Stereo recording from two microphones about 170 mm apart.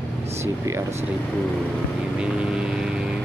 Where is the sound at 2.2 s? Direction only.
5° right (ahead or behind).